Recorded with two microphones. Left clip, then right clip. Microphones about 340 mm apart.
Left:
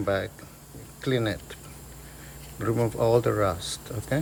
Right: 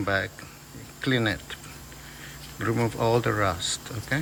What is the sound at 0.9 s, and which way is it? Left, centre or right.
Speech, centre.